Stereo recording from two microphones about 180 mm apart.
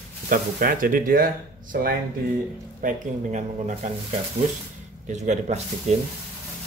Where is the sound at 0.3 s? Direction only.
50° right (ahead or behind).